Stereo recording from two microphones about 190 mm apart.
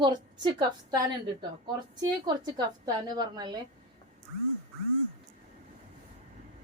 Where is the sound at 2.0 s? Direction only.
20° right (ahead or behind).